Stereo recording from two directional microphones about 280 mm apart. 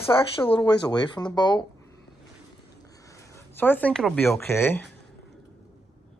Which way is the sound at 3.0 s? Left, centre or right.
Centre.